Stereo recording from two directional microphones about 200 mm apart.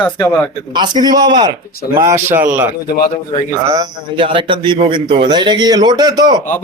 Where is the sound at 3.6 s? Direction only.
15° right (ahead or behind).